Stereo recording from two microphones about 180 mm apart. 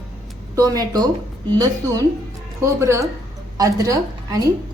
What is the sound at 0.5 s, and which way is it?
A woman's voice, 20° right (ahead or behind).